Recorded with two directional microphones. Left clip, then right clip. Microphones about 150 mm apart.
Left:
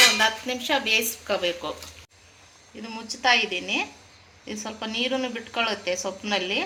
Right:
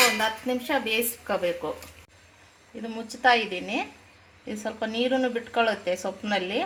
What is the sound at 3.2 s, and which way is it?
A woman's voice, 80° right.